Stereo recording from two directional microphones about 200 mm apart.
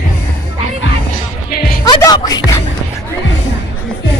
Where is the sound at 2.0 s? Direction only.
20° left (ahead or behind).